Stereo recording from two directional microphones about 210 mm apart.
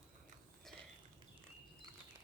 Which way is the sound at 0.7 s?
Centre (ahead or behind).